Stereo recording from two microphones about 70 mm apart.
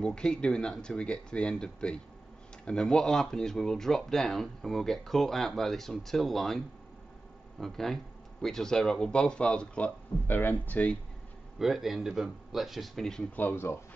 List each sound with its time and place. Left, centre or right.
0.0 s speech: centre
7.6 s speech: centre
10.2 s speech: left
11.5 s speech: centre
13.4 s speech: left